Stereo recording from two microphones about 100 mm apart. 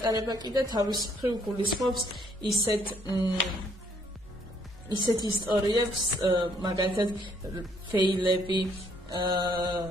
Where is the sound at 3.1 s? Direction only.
40° left (ahead or behind).